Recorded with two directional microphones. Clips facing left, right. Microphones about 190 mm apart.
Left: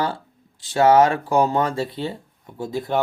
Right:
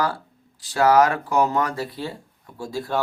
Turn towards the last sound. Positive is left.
turn(degrees=20)  # may be behind; listen again after turning